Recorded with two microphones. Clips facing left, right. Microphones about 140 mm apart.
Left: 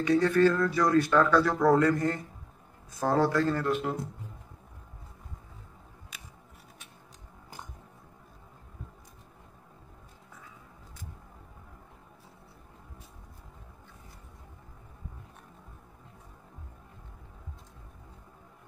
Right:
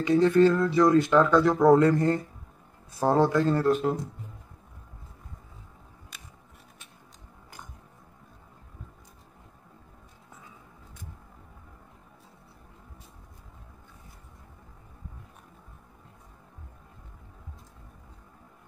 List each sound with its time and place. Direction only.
0.0 s speech: 20° right (ahead or behind)
3.5 s speech: 35° right (ahead or behind)